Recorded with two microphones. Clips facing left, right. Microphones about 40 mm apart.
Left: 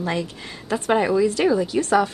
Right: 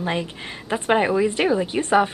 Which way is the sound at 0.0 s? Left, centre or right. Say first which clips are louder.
Even; right.